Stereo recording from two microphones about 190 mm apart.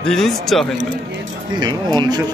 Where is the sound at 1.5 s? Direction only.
25° right (ahead or behind).